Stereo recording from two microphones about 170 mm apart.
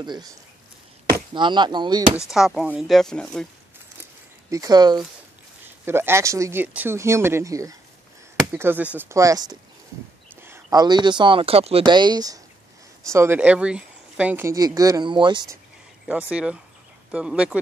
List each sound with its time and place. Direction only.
0.0 s speech: 25° right (ahead or behind)
1.3 s speech: 25° right (ahead or behind)
2.3 s speech: 5° right (ahead or behind)
4.5 s speech: 20° right (ahead or behind)
5.9 s speech: 15° right (ahead or behind)
16.1 s speech: 5° right (ahead or behind)